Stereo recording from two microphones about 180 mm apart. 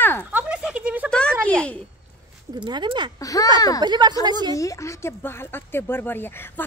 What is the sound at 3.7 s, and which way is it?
Speech, 25° right (ahead or behind).